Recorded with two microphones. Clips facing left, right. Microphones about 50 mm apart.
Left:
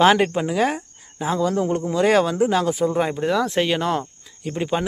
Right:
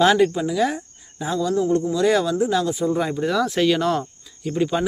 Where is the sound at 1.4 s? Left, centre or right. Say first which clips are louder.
Even; left.